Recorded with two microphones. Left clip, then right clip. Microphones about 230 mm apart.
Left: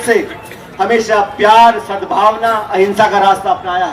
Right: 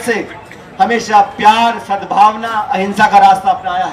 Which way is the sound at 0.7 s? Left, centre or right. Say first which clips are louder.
Right 2 dB; right.